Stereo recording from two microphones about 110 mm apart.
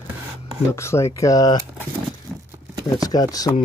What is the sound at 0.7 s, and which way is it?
Speech, 25° left (ahead or behind).